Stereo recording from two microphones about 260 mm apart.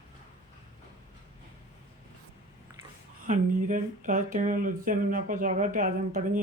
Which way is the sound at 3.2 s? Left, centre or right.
Right.